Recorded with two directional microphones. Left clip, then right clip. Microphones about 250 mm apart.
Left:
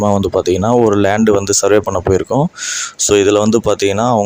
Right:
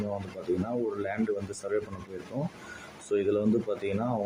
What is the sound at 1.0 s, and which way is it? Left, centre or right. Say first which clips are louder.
Speech: left 19 dB; left.